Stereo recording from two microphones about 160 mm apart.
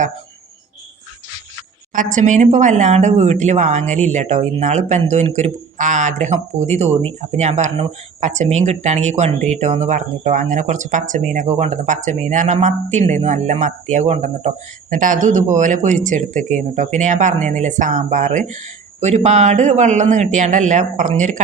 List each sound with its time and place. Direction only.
1.9 s speech: 55° right (ahead or behind)